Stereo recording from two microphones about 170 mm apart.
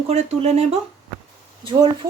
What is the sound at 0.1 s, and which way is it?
Speech, 40° right (ahead or behind).